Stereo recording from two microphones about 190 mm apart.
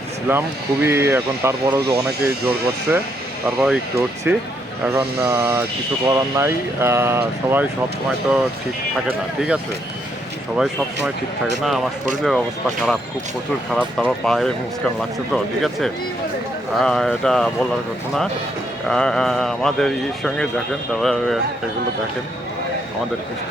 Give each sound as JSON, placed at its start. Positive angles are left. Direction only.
{"t": 0.3, "sound": "speech", "side_deg": -10}
{"t": 3.4, "sound": "a man's voice", "side_deg": -5}
{"t": 3.9, "sound": "speech", "side_deg": -15}
{"t": 9.0, "sound": "a man's voice", "side_deg": -5}
{"t": 18.9, "sound": "a man's voice", "side_deg": 5}